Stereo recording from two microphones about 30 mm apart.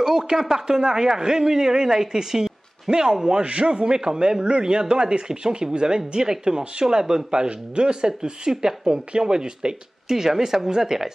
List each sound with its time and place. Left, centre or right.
0.0 s a sound: centre
0.5 s a man's voice: right
3.4 s a man's voice: right
10.0 s a woman's voice: centre